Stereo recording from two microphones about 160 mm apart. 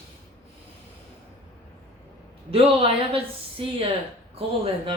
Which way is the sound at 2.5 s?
35° right (ahead or behind).